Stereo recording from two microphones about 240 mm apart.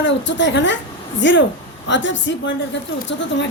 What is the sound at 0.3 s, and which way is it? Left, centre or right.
A woman's voice, left.